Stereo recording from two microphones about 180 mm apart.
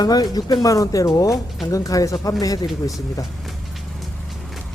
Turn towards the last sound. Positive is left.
turn(degrees=0)  # may be behind; listen again after turning